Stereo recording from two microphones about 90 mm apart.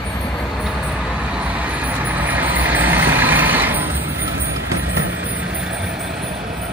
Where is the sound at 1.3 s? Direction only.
15° right (ahead or behind).